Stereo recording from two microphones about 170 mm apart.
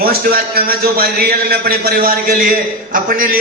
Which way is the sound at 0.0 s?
60° right (ahead or behind).